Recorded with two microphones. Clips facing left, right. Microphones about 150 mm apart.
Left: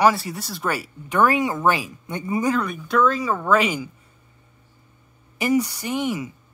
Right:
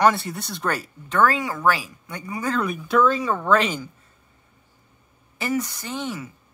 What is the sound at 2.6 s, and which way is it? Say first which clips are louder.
Speech: right 1 dB; centre (ahead or behind).